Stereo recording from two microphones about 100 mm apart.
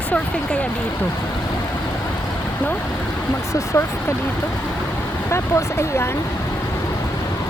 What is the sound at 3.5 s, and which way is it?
Speech, 30° left (ahead or behind).